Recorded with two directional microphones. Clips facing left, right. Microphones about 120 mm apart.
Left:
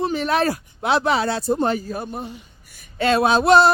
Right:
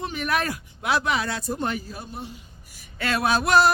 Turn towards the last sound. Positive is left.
turn(degrees=25)  # may be behind; listen again after turning